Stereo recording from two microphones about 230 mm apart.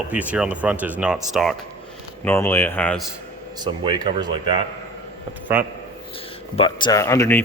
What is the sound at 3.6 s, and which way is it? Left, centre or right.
Speech, centre.